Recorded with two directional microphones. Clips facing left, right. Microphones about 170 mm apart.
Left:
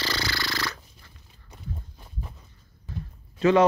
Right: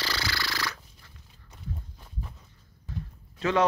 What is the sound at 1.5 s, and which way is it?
Walk, 10° left (ahead or behind).